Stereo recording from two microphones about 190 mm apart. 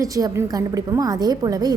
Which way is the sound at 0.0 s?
20° right (ahead or behind).